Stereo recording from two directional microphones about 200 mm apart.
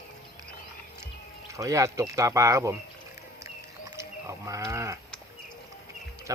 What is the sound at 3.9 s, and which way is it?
Sheep, 15° right (ahead or behind).